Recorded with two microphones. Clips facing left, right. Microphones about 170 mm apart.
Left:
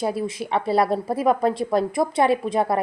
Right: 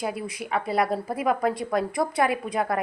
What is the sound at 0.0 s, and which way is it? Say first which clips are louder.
A woman's voice: left 5 dB; 30° left (ahead or behind).